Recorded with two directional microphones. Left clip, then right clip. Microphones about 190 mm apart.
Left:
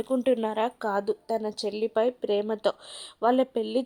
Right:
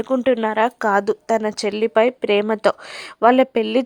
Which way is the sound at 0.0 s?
15° right (ahead or behind).